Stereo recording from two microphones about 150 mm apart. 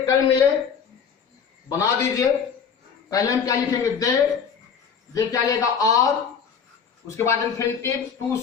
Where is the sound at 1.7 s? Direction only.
20° left (ahead or behind).